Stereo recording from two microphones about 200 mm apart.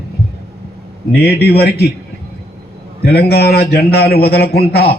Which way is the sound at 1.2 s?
55° left (ahead or behind).